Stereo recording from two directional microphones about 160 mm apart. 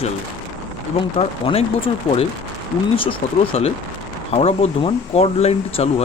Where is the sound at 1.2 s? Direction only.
35° left (ahead or behind).